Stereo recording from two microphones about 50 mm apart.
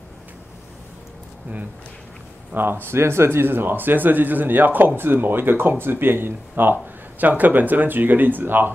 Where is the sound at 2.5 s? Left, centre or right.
Right.